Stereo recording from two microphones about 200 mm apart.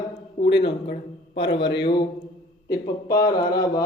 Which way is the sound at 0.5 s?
60° left (ahead or behind).